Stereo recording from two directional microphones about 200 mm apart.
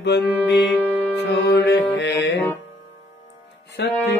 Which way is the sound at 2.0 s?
60° left (ahead or behind).